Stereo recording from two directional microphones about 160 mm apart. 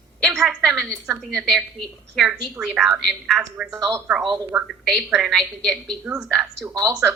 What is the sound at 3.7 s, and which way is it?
Speech, 20° right (ahead or behind).